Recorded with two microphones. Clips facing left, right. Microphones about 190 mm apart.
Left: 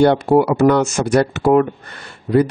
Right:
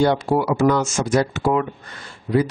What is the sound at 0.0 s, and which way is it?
Speech, 60° left (ahead or behind).